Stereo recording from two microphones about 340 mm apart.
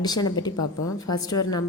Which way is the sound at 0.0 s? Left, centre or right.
Centre.